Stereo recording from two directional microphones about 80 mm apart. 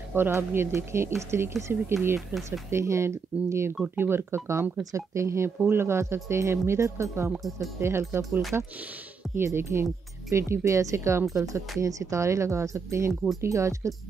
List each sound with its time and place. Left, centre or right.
0.1 s speech: right
3.8 s speech: right
7.2 s speech: centre
7.8 s speech: right
13.1 s speech: centre
13.4 s speech: right